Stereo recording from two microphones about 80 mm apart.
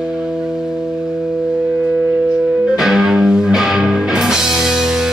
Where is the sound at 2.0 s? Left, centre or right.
Centre.